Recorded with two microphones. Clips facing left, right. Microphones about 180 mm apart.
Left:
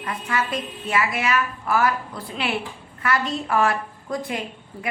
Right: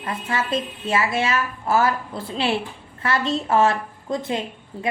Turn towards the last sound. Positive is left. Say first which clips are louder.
# right 4 dB
turn(degrees=-25)  # may be behind; listen again after turning